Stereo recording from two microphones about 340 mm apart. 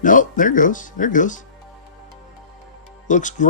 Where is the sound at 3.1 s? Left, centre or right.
Left.